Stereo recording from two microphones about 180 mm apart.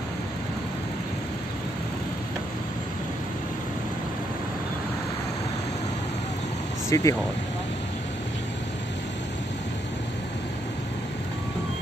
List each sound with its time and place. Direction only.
6.9 s speech: 15° left (ahead or behind)